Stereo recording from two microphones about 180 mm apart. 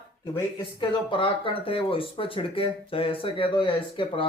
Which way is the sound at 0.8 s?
25° left (ahead or behind).